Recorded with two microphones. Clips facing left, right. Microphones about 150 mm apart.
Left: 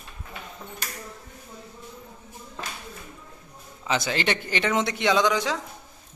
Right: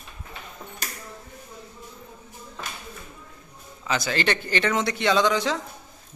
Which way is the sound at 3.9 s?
20° left (ahead or behind).